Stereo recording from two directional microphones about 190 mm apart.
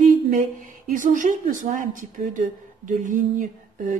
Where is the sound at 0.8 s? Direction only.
45° right (ahead or behind).